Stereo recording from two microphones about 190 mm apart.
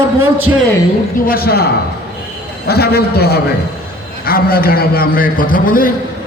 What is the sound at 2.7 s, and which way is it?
A man's voice, 55° left (ahead or behind).